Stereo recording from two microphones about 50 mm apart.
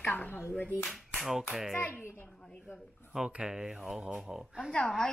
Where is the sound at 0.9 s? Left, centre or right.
Centre.